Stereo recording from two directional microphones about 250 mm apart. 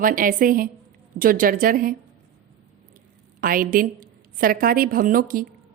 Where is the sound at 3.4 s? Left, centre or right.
Right.